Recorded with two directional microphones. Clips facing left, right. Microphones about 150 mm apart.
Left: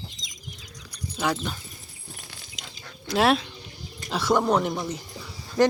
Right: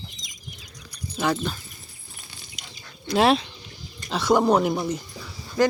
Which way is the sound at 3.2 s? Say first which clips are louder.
Right 2 dB; centre (ahead or behind).